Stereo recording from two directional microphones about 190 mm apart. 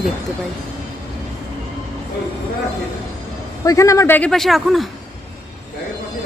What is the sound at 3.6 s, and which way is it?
A man's voice, 15° left (ahead or behind).